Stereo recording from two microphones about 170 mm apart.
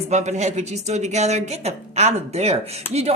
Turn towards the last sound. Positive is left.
turn(degrees=-40)  # may be behind; listen again after turning